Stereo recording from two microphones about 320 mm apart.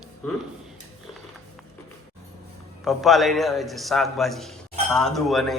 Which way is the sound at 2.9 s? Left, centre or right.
Centre.